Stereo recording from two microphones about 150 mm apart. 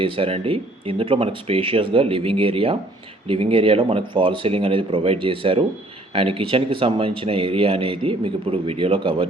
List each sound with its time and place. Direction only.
0.0 s speech: 40° right (ahead or behind)